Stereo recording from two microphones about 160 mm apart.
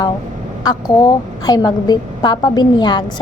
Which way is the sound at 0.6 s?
25° left (ahead or behind).